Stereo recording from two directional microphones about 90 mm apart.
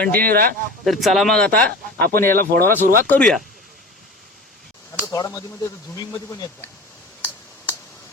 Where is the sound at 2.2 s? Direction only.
30° left (ahead or behind).